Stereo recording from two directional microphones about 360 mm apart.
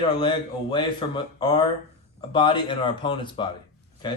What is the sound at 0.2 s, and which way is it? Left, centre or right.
Speech, centre.